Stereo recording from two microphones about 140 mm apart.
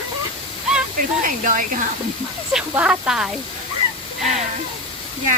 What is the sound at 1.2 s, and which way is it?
Speech, 70° right (ahead or behind).